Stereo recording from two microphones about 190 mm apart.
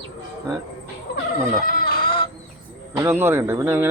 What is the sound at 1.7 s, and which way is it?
Chicken, 45° left (ahead or behind).